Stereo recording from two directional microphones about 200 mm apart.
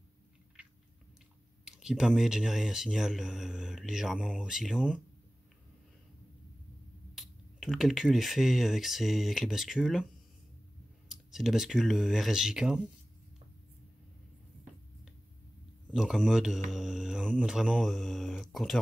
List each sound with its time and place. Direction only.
0.6 s chewing: 5° right (ahead or behind)
1.6 s speech: 5° right (ahead or behind)
7.2 s speech: centre (ahead or behind)
11.1 s speech: centre (ahead or behind)
15.9 s speech: centre (ahead or behind)